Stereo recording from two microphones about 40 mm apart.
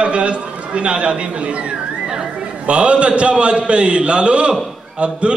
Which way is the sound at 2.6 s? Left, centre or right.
Right.